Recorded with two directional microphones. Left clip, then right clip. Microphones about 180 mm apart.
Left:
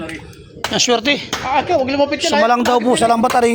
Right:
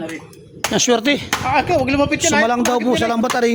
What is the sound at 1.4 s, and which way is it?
Speech, 15° right (ahead or behind).